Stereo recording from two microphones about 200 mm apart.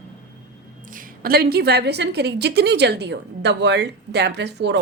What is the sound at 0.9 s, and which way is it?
A woman's voice, 45° right (ahead or behind).